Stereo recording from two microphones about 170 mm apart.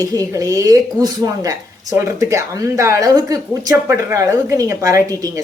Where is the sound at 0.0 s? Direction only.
20° right (ahead or behind).